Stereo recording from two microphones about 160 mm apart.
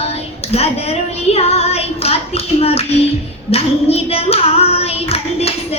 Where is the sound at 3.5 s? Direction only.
40° left (ahead or behind).